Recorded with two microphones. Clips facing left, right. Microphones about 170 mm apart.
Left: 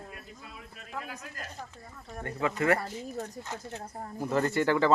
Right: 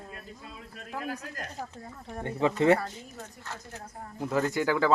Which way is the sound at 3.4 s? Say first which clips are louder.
Left 3 dB; 20° left (ahead or behind).